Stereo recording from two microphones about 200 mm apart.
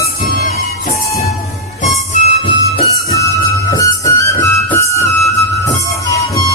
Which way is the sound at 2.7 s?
15° left (ahead or behind).